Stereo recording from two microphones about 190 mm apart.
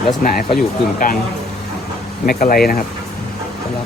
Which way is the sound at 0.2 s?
50° left (ahead or behind).